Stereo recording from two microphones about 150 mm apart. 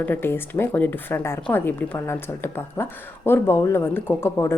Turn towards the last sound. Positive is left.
turn(degrees=15)  # may be behind; listen again after turning